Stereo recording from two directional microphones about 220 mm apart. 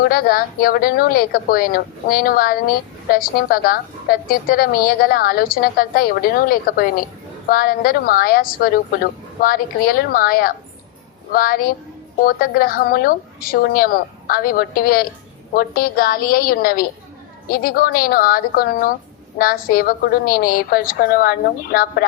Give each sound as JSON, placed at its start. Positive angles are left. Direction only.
{"t": 0.1, "sound": "a woman's voice", "side_deg": 40}